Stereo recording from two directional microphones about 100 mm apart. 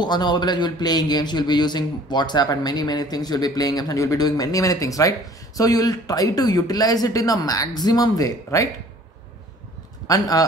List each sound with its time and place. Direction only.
0.0 s speech: 45° left (ahead or behind)
10.0 s speech: 35° left (ahead or behind)